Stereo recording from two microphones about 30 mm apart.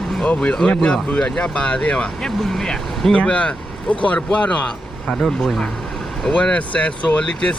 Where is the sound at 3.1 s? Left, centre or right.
Left.